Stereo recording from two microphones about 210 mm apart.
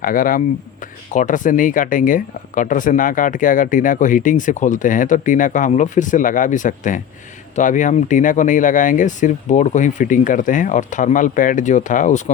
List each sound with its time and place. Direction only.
0.0 s speech: 40° left (ahead or behind)